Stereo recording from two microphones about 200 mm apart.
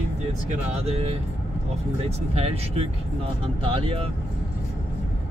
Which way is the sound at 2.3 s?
30° right (ahead or behind).